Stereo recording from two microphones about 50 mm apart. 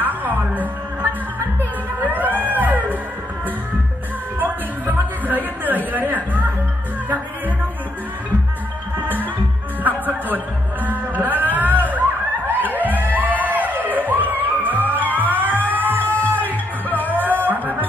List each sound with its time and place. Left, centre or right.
0.0 s music: right
4.4 s music: right
9.0 s music: right
16.1 s music: left
16.3 s music: right